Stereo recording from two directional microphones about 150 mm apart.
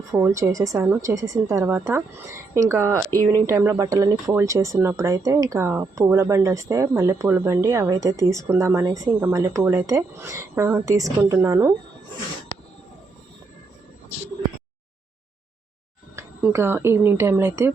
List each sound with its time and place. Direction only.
0.1 s a woman's voice: 20° right (ahead or behind)
16.1 s a woman's voice: 15° right (ahead or behind)